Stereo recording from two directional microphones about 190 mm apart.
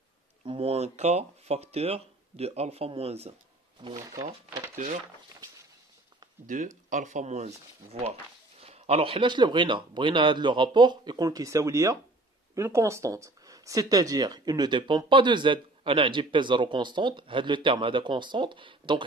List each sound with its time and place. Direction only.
0.5 s speech: 30° right (ahead or behind)
6.4 s speech: 40° right (ahead or behind); by 19.0 s 25° right (ahead or behind)